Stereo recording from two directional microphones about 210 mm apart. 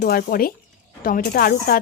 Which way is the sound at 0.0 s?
45° left (ahead or behind).